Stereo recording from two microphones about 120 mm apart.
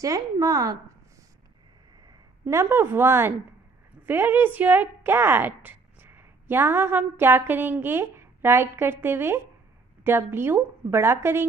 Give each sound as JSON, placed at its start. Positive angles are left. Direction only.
{"t": 0.0, "sound": "a woman's voice", "side_deg": -25}
{"t": 2.4, "sound": "a woman's voice", "side_deg": -20}